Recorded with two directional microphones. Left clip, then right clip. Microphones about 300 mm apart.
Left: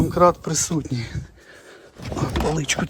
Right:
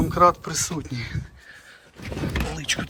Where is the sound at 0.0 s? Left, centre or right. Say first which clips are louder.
Left 1 dB; centre.